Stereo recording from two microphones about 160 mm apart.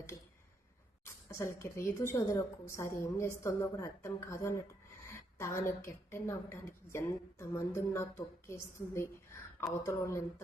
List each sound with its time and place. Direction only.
1.0 s a woman's voice: 15° left (ahead or behind)